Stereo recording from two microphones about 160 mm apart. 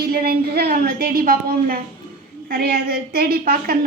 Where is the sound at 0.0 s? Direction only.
70° right (ahead or behind).